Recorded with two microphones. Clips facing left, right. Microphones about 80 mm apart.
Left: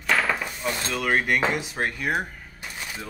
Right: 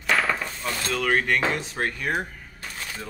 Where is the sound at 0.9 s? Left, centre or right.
Centre.